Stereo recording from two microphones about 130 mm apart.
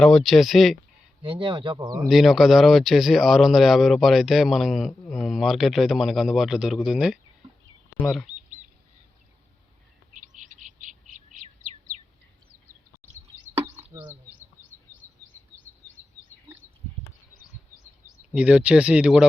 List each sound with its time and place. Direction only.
0.0 s speech: centre (ahead or behind)
1.2 s speech: 40° right (ahead or behind)
2.0 s speech: centre (ahead or behind)
10.1 s chirp: 75° right (ahead or behind)
11.9 s bird: 70° right (ahead or behind)
13.9 s a sound: 25° right (ahead or behind)
18.3 s speech: 10° right (ahead or behind)